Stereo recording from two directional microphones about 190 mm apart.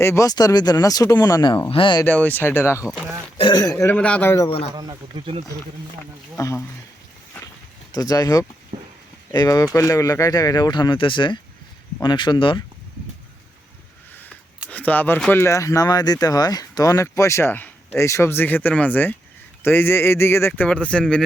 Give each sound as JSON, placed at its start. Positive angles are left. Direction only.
{"t": 0.0, "sound": "speech", "side_deg": 15}
{"t": 2.0, "sound": "speech", "side_deg": 10}
{"t": 2.8, "sound": "speech", "side_deg": -5}
{"t": 3.3, "sound": "speech", "side_deg": 25}
{"t": 4.4, "sound": "speech", "side_deg": 30}
{"t": 4.7, "sound": "speech", "side_deg": -20}
{"t": 6.3, "sound": "speech", "side_deg": 15}
{"t": 7.9, "sound": "speech", "side_deg": 20}
{"t": 14.7, "sound": "speech", "side_deg": 10}